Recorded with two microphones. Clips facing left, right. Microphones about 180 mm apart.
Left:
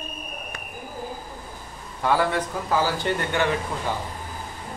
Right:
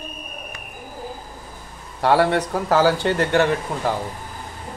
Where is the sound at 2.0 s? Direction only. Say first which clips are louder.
Right 5 dB; 70° right (ahead or behind).